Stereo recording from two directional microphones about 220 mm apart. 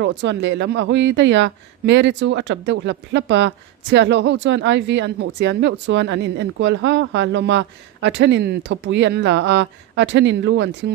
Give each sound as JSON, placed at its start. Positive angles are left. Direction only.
{"t": 0.0, "sound": "speech", "side_deg": -55}